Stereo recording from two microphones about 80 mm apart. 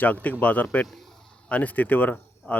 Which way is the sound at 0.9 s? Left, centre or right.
Centre.